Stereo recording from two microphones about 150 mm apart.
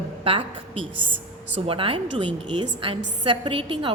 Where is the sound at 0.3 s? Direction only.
40° right (ahead or behind).